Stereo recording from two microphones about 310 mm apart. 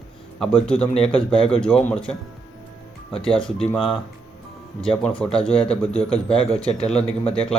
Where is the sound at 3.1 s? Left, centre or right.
Centre.